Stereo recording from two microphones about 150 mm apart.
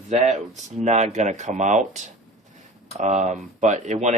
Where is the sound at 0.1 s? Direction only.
50° right (ahead or behind).